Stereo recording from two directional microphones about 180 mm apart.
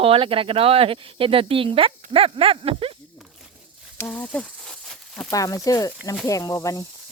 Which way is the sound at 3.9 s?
10° left (ahead or behind).